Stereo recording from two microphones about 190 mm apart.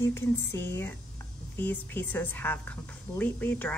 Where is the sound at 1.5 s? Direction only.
10° left (ahead or behind).